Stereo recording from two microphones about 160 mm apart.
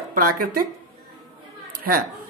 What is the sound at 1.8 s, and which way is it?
Speech, 65° right (ahead or behind).